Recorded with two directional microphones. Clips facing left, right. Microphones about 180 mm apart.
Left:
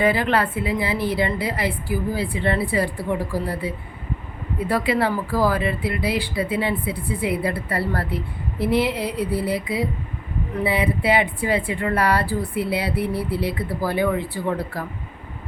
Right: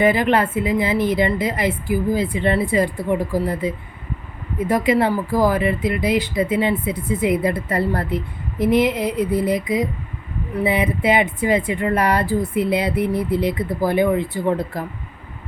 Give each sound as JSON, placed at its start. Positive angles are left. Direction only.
{"t": 0.0, "sound": "a woman's voice", "side_deg": -20}
{"t": 4.7, "sound": "a woman's voice", "side_deg": -20}